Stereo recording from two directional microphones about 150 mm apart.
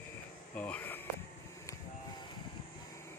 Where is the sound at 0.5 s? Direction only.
10° left (ahead or behind).